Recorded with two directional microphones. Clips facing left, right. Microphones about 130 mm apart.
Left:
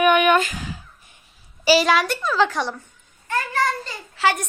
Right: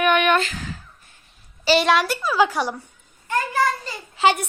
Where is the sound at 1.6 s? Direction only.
Centre (ahead or behind).